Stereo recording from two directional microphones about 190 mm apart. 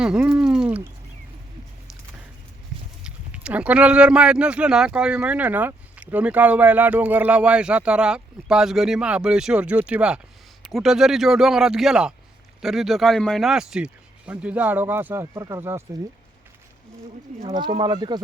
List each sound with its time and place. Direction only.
0.0 s a sound: 5° right (ahead or behind)
3.0 s speech: 5° right (ahead or behind)
17.4 s speech: 25° right (ahead or behind)